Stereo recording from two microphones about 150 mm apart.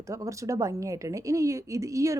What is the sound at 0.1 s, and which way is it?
Speech, 20° right (ahead or behind).